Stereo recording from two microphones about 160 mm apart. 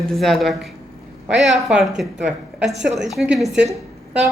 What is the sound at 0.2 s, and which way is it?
A woman's voice, centre (ahead or behind).